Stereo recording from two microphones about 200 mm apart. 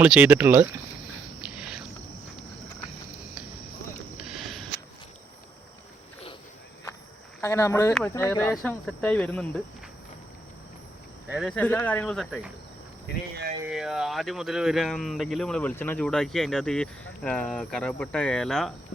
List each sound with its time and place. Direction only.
0.0 s speech: 5° right (ahead or behind)
1.4 s a sound: 5° right (ahead or behind)
4.2 s a sound: centre (ahead or behind)
7.4 s speech: 15° left (ahead or behind)
11.3 s speech: centre (ahead or behind)
13.1 s speech: 55° left (ahead or behind)
13.7 s speech: 5° right (ahead or behind)